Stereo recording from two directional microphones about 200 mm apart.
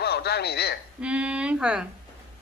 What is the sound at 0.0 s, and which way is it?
Speech, 55° left (ahead or behind).